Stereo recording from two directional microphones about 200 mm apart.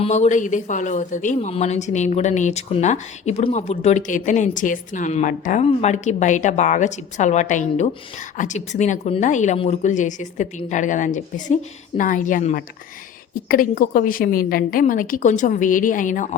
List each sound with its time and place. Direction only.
0.0 s a woman's voice: 35° left (ahead or behind)